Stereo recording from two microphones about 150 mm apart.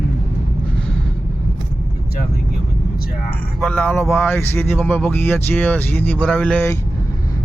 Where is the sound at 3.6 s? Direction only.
10° left (ahead or behind).